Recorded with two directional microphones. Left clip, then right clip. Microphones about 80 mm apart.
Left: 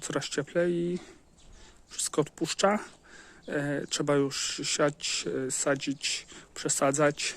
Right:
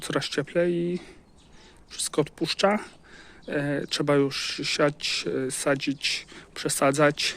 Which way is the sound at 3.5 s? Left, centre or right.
Left.